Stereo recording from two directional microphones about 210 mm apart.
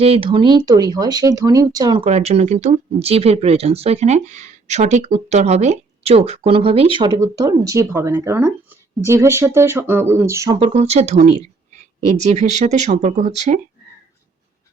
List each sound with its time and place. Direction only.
0.0 s speech: 25° right (ahead or behind)
2.0 s speech: 30° right (ahead or behind); by 10.6 s 15° right (ahead or behind)
10.6 s speech: 30° right (ahead or behind)